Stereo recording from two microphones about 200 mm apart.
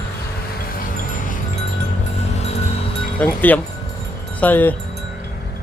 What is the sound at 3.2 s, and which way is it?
Speech, 10° left (ahead or behind).